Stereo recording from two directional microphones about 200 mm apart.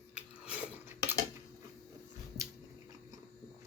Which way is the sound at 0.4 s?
5° right (ahead or behind).